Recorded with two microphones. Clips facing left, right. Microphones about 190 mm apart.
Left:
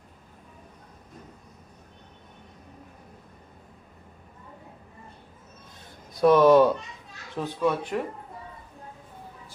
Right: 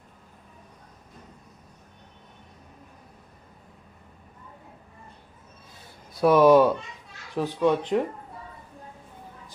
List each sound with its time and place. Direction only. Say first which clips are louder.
6.1 s speech: even; 10° right (ahead or behind)